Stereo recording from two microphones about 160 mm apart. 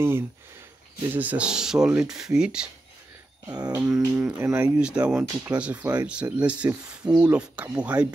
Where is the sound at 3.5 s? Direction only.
25° right (ahead or behind).